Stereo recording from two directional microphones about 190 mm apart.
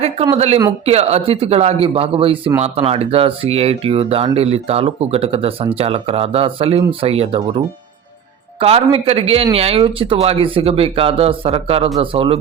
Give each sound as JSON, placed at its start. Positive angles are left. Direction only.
{"t": 0.3, "sound": "speech", "side_deg": -30}
{"t": 8.5, "sound": "speech", "side_deg": -30}